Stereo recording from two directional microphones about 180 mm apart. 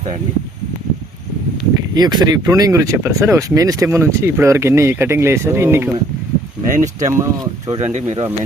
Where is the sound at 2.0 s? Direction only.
20° right (ahead or behind).